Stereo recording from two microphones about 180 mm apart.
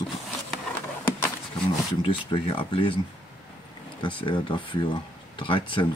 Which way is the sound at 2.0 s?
30° left (ahead or behind).